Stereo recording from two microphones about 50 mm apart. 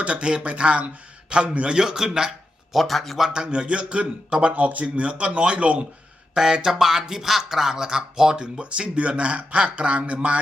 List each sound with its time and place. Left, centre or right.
0.0 s a man's voice: right
2.7 s speech: centre
3.2 s a man's voice: centre
6.3 s speech: centre